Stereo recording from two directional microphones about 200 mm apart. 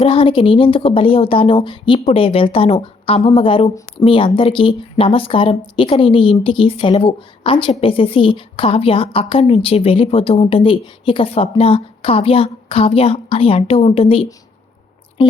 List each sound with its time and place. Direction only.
0.0 s speech: 25° left (ahead or behind)